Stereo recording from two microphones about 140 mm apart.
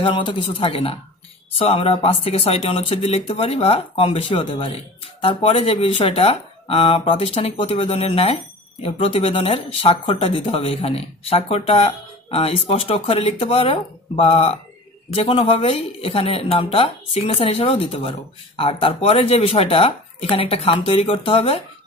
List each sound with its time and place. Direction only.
0.0 s speech: 35° left (ahead or behind)